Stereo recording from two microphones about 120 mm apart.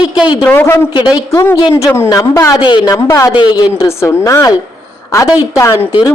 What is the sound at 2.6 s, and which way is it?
Speech, 40° left (ahead or behind).